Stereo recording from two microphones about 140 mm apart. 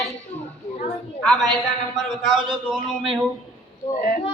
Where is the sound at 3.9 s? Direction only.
75° left (ahead or behind).